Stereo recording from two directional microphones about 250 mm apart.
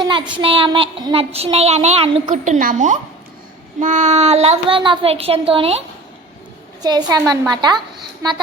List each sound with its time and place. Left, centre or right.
0.0 s a child's voice: centre
6.8 s a woman's voice: centre